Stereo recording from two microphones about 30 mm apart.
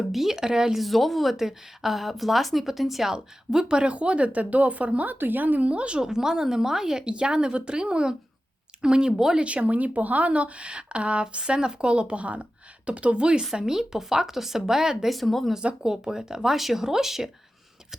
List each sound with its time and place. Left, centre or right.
0.0 s speech: centre
0.8 s a woman's voice: centre
3.1 s a woman's voice: centre
3.9 s speech: right
5.3 s speech: right
5.6 s speech: right
6.0 s a woman's voice: centre
7.0 s a woman's voice: right
9.1 s speech: centre
9.4 s speech: right
13.6 s speech: centre
15.1 s a woman's voice: centre
15.8 s a woman's voice: centre
16.6 s speech: centre